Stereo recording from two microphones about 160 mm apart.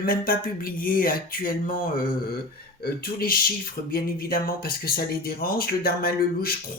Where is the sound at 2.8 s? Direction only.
65° left (ahead or behind).